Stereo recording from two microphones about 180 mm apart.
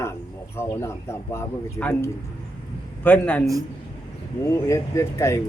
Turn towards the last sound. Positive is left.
turn(degrees=15)  # may be behind; listen again after turning